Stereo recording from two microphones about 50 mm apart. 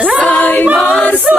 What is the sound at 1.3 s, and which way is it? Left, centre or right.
Choir, right.